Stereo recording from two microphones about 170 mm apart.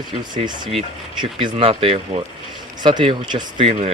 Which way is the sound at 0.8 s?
25° right (ahead or behind).